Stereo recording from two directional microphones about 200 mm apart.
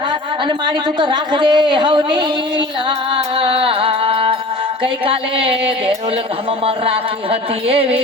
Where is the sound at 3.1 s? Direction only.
25° right (ahead or behind).